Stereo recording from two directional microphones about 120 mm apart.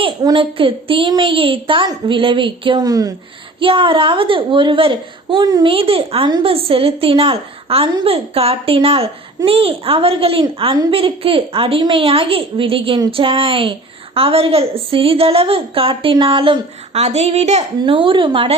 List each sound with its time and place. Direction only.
0.3 s a woman's voice: 50° right (ahead or behind)
2.8 s a woman's voice: 30° right (ahead or behind)
3.6 s a woman's voice: 50° right (ahead or behind)
5.6 s a woman's voice: 50° right (ahead or behind)
17.0 s a woman's voice: 65° right (ahead or behind)
17.8 s a woman's voice: 45° right (ahead or behind)